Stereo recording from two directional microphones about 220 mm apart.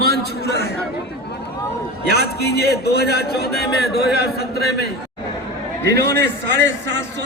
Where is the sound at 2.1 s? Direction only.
45° left (ahead or behind).